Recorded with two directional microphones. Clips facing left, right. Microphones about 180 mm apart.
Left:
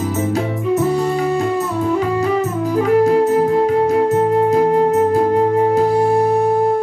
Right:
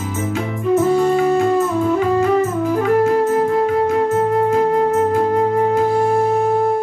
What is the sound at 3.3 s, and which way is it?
Music, 35° left (ahead or behind).